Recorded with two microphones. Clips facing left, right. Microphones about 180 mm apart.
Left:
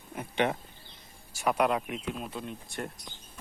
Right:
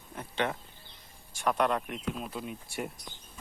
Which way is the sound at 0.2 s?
15° left (ahead or behind).